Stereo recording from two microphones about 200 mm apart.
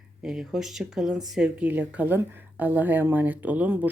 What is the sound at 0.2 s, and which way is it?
Speech, 5° right (ahead or behind).